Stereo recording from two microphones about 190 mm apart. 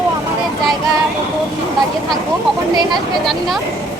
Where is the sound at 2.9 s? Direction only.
Centre (ahead or behind).